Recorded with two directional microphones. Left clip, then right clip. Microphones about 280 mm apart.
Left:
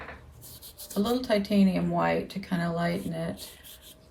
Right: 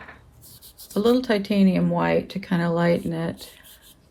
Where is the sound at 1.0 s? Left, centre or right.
Centre.